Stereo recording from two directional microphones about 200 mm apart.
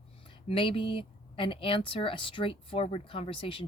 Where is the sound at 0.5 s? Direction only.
25° left (ahead or behind).